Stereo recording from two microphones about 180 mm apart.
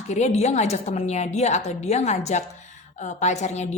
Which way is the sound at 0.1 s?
40° left (ahead or behind).